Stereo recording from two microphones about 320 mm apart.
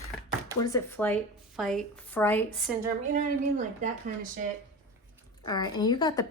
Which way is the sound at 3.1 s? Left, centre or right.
Right.